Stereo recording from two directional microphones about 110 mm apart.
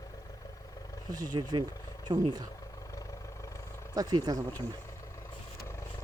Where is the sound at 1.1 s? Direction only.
40° right (ahead or behind).